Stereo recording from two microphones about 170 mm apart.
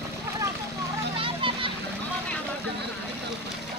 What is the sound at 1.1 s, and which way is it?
Vehicle, 30° right (ahead or behind).